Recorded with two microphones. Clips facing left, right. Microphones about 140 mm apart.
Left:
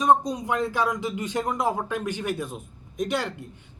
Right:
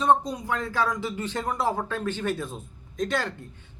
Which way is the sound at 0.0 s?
15° left (ahead or behind).